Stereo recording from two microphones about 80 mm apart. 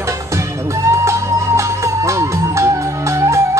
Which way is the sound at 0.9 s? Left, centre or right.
Right.